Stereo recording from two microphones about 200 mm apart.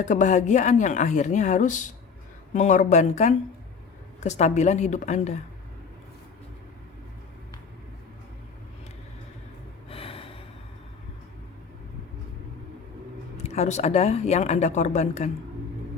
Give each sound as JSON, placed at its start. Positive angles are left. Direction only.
{"t": 0.0, "sound": "a woman's voice", "side_deg": 35}
{"t": 9.9, "sound": "gasp", "side_deg": 30}
{"t": 13.3, "sound": "a woman's voice", "side_deg": 35}